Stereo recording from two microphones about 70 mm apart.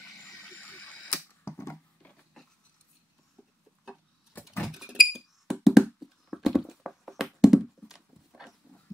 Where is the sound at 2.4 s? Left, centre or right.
Centre.